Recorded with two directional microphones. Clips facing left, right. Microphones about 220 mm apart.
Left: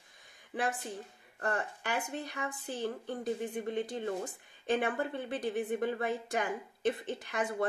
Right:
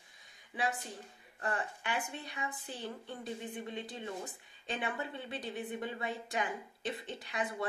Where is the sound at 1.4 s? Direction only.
45° left (ahead or behind).